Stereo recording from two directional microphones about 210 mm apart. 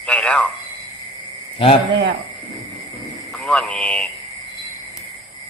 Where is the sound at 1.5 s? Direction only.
25° left (ahead or behind).